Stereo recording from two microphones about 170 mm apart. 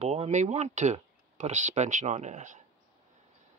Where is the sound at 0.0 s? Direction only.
40° right (ahead or behind).